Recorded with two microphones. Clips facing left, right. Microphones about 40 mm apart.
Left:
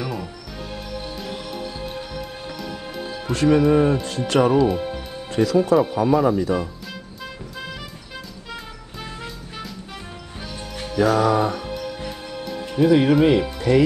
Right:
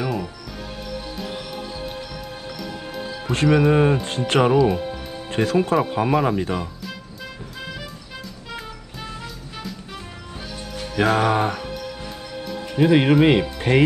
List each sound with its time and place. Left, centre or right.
0.0 s music: centre
3.4 s speech: right
11.0 s speech: right
12.7 s speech: right